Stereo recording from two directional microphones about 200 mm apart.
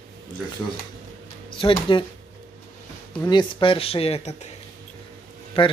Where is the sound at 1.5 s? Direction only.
25° left (ahead or behind).